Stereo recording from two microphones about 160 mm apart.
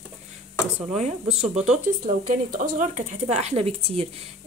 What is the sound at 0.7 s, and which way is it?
Speech, 45° right (ahead or behind).